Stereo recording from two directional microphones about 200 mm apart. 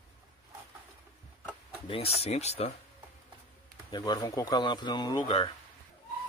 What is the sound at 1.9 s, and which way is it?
Speech, 30° left (ahead or behind).